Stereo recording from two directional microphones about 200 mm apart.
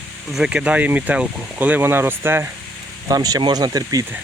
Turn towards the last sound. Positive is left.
turn(degrees=-15)  # may be behind; listen again after turning